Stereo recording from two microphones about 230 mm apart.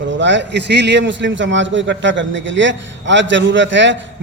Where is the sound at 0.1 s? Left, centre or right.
Right.